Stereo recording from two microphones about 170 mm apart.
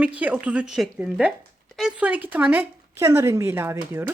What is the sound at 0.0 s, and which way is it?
Speech, 10° right (ahead or behind).